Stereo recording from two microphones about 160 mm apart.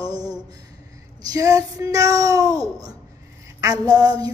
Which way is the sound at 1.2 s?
20° right (ahead or behind).